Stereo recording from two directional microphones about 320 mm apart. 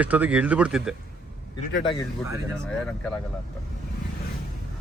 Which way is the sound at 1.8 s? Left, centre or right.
Centre.